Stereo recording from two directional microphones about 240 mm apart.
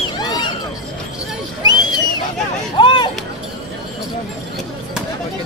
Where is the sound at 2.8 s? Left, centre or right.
Centre.